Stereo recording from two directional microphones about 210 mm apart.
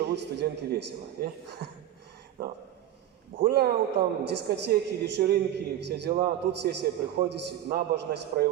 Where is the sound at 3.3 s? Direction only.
45° right (ahead or behind).